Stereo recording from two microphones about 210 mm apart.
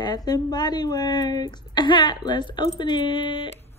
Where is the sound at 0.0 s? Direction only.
20° left (ahead or behind).